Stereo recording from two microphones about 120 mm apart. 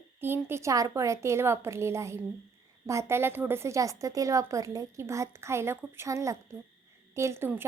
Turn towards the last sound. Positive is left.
turn(degrees=-20)  # may be behind; listen again after turning